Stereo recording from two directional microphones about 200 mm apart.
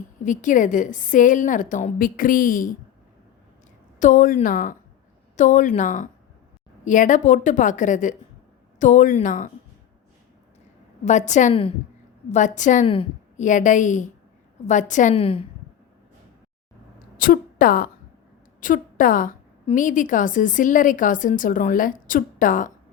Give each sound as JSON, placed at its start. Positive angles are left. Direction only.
{"t": 0.3, "sound": "a woman's voice", "side_deg": 40}
{"t": 4.0, "sound": "a woman's voice", "side_deg": 40}
{"t": 11.0, "sound": "a woman's voice", "side_deg": 35}
{"t": 17.2, "sound": "a woman's voice", "side_deg": 45}